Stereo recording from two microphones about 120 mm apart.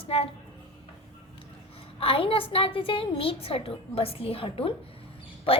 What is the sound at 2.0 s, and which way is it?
A woman's voice, 50° left (ahead or behind).